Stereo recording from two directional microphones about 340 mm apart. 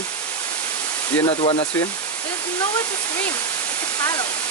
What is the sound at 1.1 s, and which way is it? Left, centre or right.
Speech, centre.